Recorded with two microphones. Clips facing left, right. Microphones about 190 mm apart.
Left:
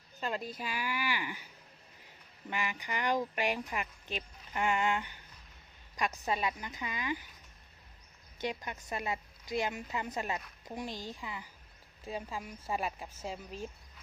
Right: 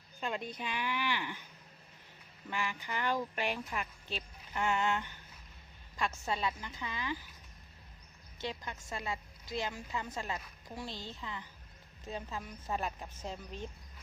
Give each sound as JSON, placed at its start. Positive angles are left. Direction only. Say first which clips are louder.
{"t": 0.2, "sound": "a woman's voice", "louder": "left 1 dB", "side_deg": 0}
{"t": 2.5, "sound": "a woman's voice", "louder": "left 1 dB", "side_deg": 15}
{"t": 8.4, "sound": "a woman's voice", "louder": "left 3 dB", "side_deg": 15}